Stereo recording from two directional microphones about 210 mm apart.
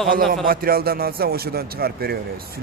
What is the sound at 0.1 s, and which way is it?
Speech, 40° right (ahead or behind).